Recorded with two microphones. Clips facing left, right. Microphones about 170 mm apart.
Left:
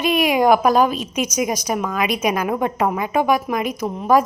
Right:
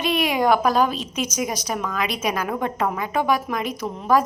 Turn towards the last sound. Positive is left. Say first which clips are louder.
# left 3 dB
turn(degrees=15)  # may be behind; listen again after turning